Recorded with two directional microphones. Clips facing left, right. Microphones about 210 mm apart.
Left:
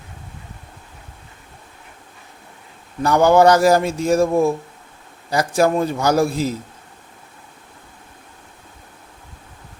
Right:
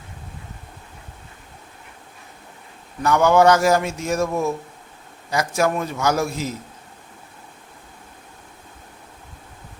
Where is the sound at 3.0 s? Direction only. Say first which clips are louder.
Left 2 dB; 35° left (ahead or behind).